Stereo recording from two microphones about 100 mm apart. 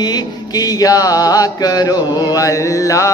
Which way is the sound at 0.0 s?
40° left (ahead or behind).